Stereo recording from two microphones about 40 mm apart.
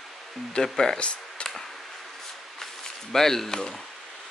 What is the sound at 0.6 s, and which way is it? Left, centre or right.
Speech, centre.